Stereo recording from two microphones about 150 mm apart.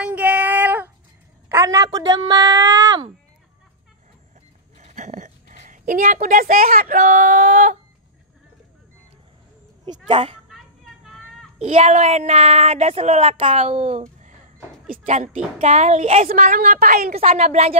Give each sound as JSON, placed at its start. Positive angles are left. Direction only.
{"t": 0.0, "sound": "child singing", "side_deg": -10}
{"t": 1.5, "sound": "speech", "side_deg": -20}
{"t": 4.7, "sound": "a woman's voice", "side_deg": -50}
{"t": 9.8, "sound": "speech", "side_deg": -35}
{"t": 11.6, "sound": "speech", "side_deg": -50}
{"t": 14.9, "sound": "speech", "side_deg": -50}
{"t": 16.3, "sound": "a woman's voice", "side_deg": -65}
{"t": 17.2, "sound": "speech", "side_deg": -45}